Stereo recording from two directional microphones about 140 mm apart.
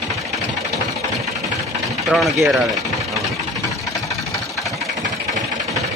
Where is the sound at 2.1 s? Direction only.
Centre (ahead or behind).